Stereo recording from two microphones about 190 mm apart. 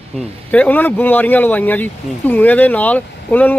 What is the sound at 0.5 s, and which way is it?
Speech, 10° left (ahead or behind).